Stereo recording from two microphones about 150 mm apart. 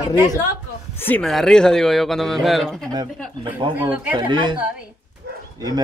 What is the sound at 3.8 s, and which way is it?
Speech, 10° right (ahead or behind).